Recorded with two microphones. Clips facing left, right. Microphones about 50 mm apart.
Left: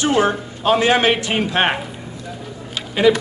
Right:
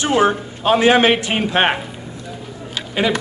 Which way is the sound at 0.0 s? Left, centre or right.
Centre.